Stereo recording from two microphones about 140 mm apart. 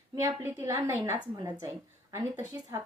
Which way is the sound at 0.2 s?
20° right (ahead or behind).